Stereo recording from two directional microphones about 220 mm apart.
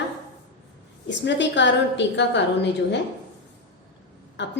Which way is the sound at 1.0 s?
55° left (ahead or behind).